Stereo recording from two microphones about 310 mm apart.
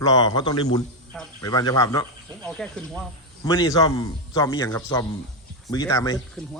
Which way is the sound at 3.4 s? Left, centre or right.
Centre.